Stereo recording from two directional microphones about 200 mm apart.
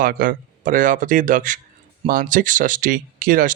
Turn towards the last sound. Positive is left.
turn(degrees=-40)  # may be behind; listen again after turning